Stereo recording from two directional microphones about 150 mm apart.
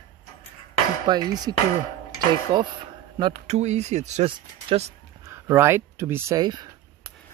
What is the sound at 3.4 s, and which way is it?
Speech, 50° right (ahead or behind).